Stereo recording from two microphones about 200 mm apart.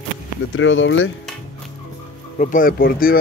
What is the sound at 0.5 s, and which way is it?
Speech, 70° left (ahead or behind).